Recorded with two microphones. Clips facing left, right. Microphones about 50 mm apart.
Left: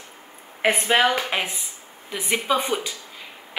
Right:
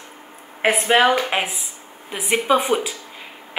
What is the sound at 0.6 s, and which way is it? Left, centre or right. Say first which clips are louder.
A woman's voice: right 3 dB; centre.